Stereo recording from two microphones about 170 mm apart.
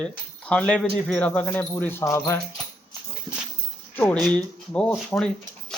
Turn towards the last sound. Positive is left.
turn(degrees=5)  # may be behind; listen again after turning